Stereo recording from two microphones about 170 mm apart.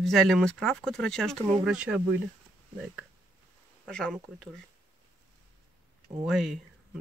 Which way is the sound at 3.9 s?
5° left (ahead or behind).